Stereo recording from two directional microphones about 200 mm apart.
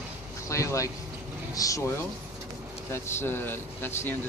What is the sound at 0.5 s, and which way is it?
Speech, 15° left (ahead or behind).